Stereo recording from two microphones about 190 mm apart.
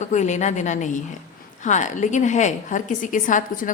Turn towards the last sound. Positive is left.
turn(degrees=45)  # may be behind; listen again after turning